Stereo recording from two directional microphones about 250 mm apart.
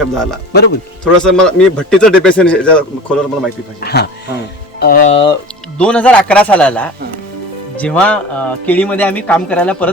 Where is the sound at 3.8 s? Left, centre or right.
Left.